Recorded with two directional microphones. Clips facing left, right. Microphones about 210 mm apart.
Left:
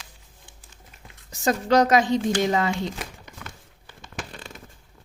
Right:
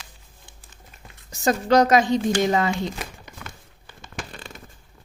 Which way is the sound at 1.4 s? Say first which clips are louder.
Right 2 dB; 45° right (ahead or behind).